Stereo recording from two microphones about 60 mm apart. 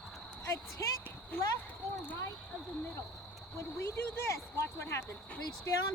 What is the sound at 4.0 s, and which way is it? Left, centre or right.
Speech, left.